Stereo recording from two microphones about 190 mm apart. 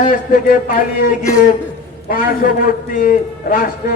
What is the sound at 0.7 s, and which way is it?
A man's voice, 45° left (ahead or behind).